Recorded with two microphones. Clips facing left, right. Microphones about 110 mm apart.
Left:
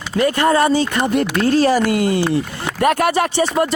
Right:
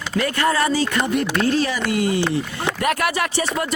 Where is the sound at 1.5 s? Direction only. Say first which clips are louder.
Left 6 dB; 40° left (ahead or behind).